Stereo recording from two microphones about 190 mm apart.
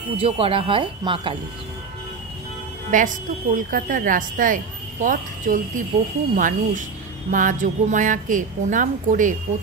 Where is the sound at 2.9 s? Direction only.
45° right (ahead or behind).